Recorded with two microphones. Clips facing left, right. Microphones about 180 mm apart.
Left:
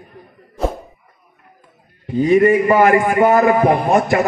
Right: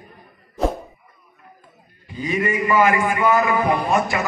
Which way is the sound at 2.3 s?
45° left (ahead or behind).